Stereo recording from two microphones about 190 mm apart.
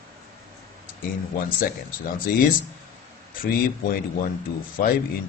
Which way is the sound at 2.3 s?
50° left (ahead or behind).